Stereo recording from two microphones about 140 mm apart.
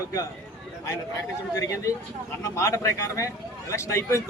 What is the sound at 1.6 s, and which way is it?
A man's voice, 25° left (ahead or behind).